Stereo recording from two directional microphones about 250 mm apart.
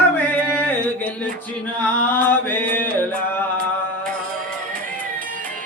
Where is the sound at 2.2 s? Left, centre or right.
Centre.